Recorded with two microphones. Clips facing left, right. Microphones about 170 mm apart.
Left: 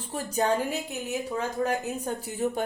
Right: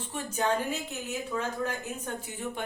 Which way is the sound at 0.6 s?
15° left (ahead or behind).